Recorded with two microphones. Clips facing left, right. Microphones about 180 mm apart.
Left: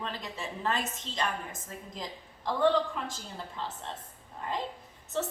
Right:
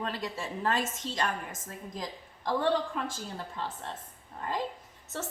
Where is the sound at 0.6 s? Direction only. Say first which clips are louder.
Right 2 dB; 45° right (ahead or behind).